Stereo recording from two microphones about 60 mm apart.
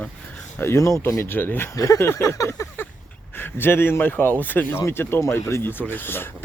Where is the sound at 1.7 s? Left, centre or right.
Left.